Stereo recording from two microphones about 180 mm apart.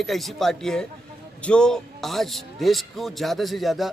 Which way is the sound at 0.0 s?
Centre (ahead or behind).